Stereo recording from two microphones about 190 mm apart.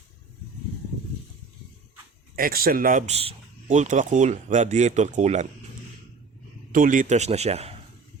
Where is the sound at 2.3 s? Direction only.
50° right (ahead or behind).